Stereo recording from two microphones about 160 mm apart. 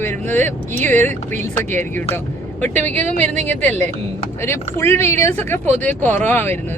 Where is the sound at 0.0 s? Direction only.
15° left (ahead or behind).